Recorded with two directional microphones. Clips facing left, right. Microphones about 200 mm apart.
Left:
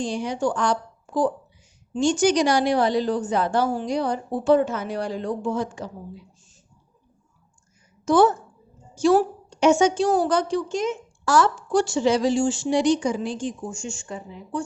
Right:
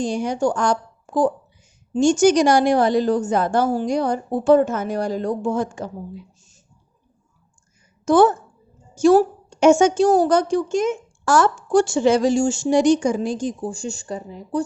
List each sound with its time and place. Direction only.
0.0 s a woman's voice: 45° right (ahead or behind)
8.0 s a woman's voice: 50° right (ahead or behind)